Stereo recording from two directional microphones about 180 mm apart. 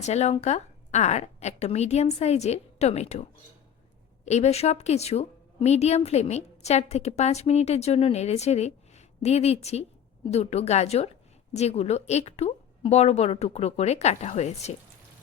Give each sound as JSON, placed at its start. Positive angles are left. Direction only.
{"t": 0.0, "sound": "a woman's voice", "side_deg": 40}
{"t": 4.3, "sound": "a woman's voice", "side_deg": 40}